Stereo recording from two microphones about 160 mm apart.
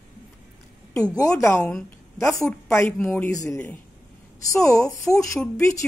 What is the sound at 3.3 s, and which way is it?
Speech, 20° left (ahead or behind).